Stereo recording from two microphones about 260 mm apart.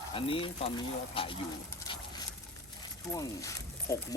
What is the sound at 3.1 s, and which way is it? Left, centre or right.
Speech, centre.